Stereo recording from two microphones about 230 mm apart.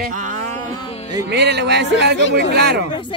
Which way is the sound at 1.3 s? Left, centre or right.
Right.